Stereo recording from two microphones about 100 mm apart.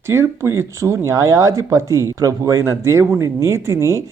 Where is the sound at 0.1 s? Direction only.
25° right (ahead or behind).